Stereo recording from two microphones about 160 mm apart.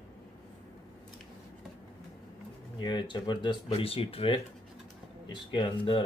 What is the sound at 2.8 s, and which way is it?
Speech, 30° left (ahead or behind).